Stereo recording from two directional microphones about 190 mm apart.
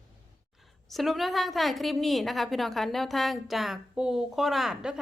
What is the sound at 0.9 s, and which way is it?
A woman's voice, centre (ahead or behind).